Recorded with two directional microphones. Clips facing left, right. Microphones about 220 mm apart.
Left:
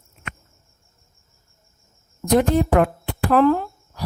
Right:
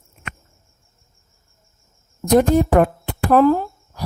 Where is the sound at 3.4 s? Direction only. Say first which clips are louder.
Right 2 dB; 10° right (ahead or behind).